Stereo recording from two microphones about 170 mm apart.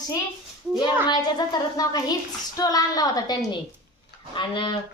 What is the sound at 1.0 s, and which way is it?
A woman's voice, 25° left (ahead or behind).